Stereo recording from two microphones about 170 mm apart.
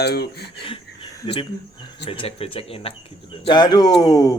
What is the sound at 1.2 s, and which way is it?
Speech, 30° left (ahead or behind).